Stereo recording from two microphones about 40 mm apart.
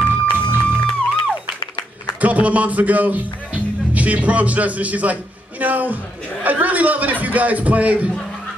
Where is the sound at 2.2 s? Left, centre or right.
Right.